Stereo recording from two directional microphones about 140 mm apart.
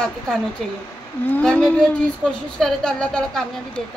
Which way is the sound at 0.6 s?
Centre (ahead or behind).